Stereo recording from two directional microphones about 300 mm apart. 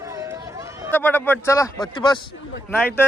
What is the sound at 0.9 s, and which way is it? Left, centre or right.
Speech, centre.